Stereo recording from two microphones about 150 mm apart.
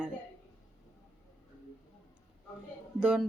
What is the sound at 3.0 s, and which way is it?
Speech, 5° right (ahead or behind).